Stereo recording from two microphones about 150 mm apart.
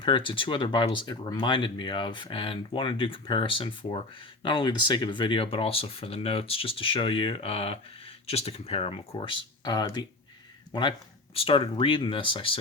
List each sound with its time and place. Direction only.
0.0 s speech: 35° left (ahead or behind)